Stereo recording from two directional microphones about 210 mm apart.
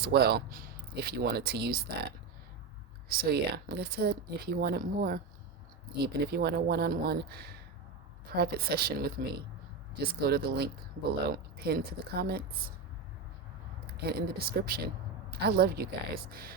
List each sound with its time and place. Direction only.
0.0 s speech: 50° right (ahead or behind)
13.9 s speech: 50° right (ahead or behind)